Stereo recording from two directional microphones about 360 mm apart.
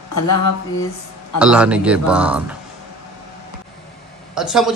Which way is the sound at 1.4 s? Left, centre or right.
Centre.